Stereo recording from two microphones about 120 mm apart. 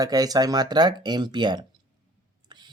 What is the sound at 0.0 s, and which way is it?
Speech, 30° right (ahead or behind).